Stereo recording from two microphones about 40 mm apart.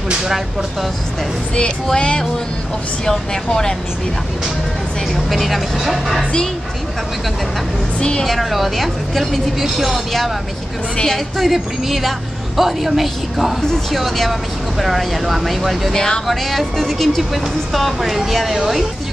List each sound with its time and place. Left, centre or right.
0.2 s speech: centre
2.0 s a woman's voice: left
5.1 s speech: centre
8.0 s a woman's voice: left
8.3 s speech: centre
15.9 s speech: centre
16.3 s speech: centre